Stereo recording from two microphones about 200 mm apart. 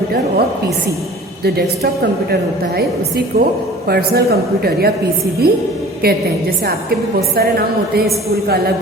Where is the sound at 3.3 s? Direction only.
50° right (ahead or behind).